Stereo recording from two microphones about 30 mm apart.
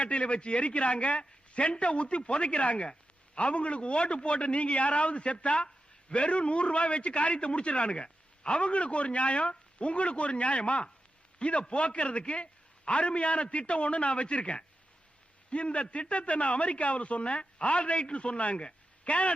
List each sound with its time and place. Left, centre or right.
0.0 s a man's voice: left